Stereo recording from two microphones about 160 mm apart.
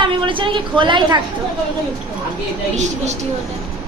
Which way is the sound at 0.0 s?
30° right (ahead or behind).